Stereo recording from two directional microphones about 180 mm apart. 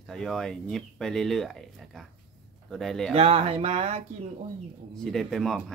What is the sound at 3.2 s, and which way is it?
Speech, 35° right (ahead or behind).